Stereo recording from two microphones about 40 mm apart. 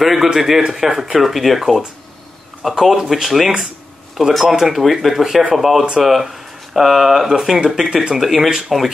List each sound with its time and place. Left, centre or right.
0.0 s speech: centre